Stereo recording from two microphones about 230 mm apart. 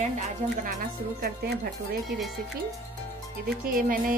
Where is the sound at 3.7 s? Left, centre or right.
Right.